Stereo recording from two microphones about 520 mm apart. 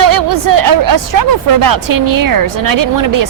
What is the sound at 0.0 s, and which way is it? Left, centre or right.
Speech, right.